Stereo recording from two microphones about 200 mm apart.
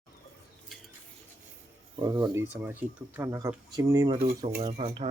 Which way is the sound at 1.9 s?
20° right (ahead or behind).